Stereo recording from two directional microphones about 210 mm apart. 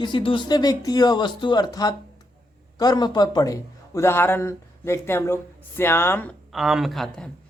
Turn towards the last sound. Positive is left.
turn(degrees=0)  # may be behind; listen again after turning